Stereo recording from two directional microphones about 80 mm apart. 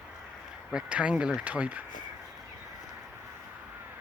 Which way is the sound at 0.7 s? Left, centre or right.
Centre.